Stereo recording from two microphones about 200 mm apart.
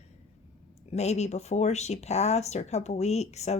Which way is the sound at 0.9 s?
35° left (ahead or behind).